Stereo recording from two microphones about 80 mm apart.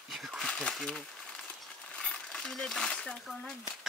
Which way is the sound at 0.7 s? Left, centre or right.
Centre.